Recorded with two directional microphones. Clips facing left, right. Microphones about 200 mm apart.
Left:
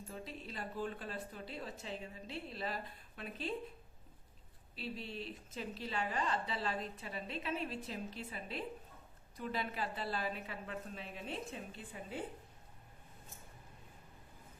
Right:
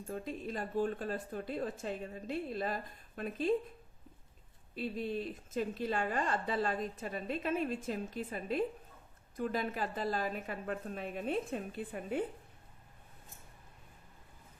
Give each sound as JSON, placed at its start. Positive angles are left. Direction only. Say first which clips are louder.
{"t": 0.1, "sound": "speech", "louder": "right 9 dB", "side_deg": -50}
{"t": 4.7, "sound": "speech", "louder": "right 8 dB", "side_deg": -50}